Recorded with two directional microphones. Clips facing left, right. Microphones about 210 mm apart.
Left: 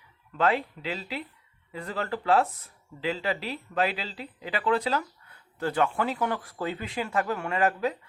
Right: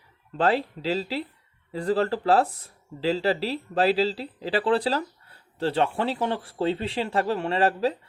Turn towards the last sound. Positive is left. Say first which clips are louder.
# right 3 dB
turn(degrees=-30)  # may be behind; listen again after turning